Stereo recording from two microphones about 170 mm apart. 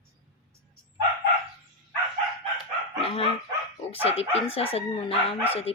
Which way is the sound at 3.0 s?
35° left (ahead or behind).